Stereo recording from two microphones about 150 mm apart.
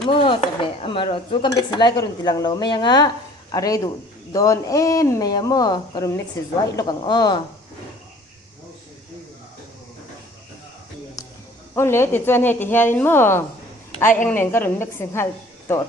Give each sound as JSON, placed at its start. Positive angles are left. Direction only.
{"t": 0.1, "sound": "speech", "side_deg": 35}
{"t": 11.7, "sound": "a woman's voice", "side_deg": 15}